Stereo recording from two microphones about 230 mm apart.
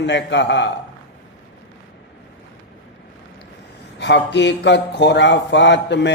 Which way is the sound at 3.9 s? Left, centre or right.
Left.